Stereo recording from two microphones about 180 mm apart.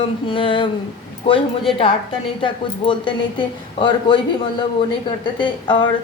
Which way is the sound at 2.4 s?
25° left (ahead or behind).